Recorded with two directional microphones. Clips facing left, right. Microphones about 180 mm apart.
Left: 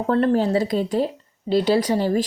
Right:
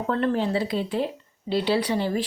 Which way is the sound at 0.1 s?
40° left (ahead or behind).